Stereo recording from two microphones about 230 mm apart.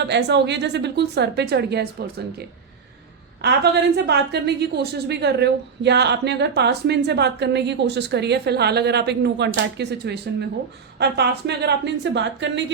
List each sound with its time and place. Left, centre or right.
0.0 s a woman's voice: right
3.4 s a woman's voice: right